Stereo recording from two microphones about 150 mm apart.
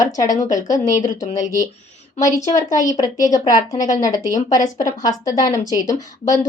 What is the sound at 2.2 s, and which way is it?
A woman's voice, 25° left (ahead or behind).